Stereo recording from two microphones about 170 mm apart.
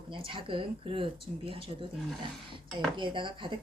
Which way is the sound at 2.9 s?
30° right (ahead or behind).